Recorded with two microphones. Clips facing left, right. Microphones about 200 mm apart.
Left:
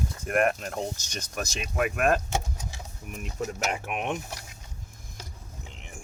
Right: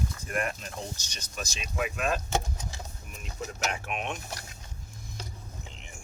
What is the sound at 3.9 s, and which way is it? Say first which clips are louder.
Speech: left 4 dB; 55° left (ahead or behind).